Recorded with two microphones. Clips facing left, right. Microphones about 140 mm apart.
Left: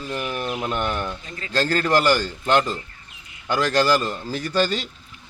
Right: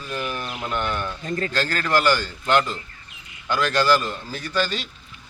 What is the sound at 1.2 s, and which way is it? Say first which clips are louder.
Speech: right 11 dB; 50° right (ahead or behind).